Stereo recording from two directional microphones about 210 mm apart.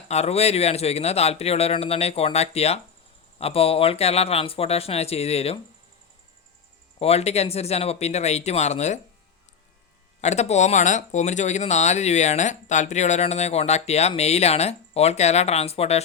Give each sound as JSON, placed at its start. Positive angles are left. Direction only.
{"t": 0.1, "sound": "speech", "side_deg": 30}
{"t": 7.0, "sound": "speech", "side_deg": 30}
{"t": 10.2, "sound": "speech", "side_deg": 30}